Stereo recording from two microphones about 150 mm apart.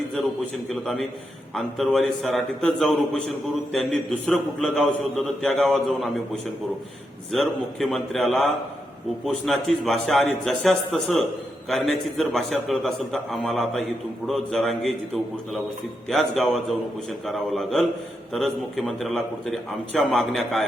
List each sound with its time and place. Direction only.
0.7 s a man's voice: centre (ahead or behind)
7.3 s a man's voice: centre (ahead or behind)
16.0 s a man's voice: centre (ahead or behind)